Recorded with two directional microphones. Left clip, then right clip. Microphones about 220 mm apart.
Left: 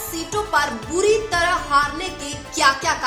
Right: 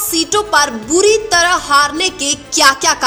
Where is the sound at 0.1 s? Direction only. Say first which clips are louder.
Right 8 dB; 40° right (ahead or behind).